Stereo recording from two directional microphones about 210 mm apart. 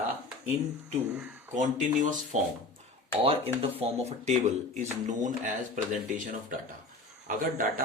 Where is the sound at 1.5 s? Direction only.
35° right (ahead or behind).